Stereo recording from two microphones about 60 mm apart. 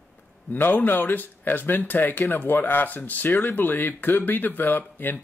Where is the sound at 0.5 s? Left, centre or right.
Left.